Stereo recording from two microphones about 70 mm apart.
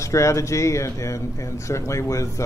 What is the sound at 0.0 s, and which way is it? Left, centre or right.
Speech, left.